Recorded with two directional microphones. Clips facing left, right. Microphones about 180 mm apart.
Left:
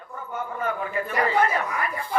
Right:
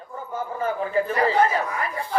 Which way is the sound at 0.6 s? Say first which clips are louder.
Right 6 dB; 30° right (ahead or behind).